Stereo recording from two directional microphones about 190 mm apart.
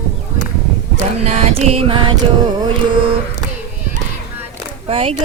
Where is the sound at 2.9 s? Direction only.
30° right (ahead or behind).